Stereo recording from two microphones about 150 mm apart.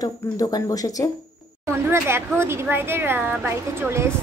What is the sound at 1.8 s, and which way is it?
A woman's voice, 15° right (ahead or behind).